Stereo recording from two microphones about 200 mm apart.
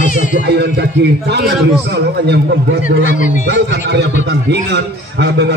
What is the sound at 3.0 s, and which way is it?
Speech, 40° left (ahead or behind).